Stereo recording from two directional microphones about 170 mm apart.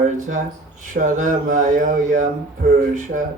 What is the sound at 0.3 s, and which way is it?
Speech, 50° right (ahead or behind).